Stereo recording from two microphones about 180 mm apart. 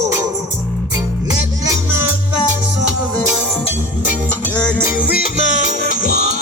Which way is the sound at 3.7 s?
45° left (ahead or behind).